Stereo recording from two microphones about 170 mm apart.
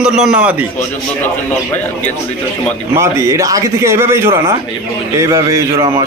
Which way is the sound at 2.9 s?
15° right (ahead or behind).